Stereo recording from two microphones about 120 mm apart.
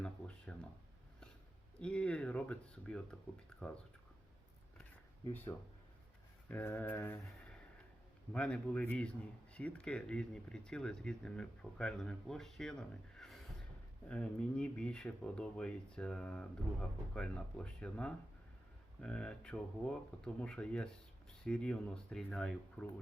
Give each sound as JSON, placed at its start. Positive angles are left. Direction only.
{"t": 0.0, "sound": "a sound", "side_deg": 10}
{"t": 1.8, "sound": "speech", "side_deg": 10}
{"t": 6.5, "sound": "speech", "side_deg": 15}
{"t": 8.3, "sound": "speech", "side_deg": 10}